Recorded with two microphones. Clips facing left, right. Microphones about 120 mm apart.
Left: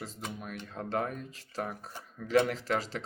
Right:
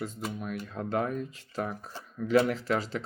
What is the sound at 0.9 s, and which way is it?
Speech, 40° left (ahead or behind).